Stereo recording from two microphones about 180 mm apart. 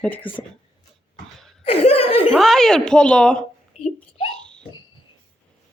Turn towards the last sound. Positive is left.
turn(degrees=5)  # may be behind; listen again after turning